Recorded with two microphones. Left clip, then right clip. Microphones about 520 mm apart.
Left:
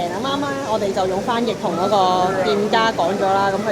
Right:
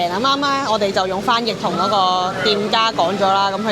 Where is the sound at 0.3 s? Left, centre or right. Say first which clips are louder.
Right 6 dB; right.